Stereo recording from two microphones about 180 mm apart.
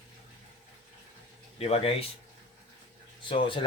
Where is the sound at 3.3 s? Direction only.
30° left (ahead or behind).